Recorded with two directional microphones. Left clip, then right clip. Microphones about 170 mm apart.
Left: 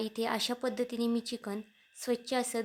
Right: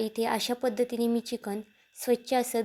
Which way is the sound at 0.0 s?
15° right (ahead or behind).